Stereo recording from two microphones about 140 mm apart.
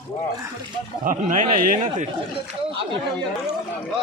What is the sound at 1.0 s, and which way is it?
Speech, 70° right (ahead or behind).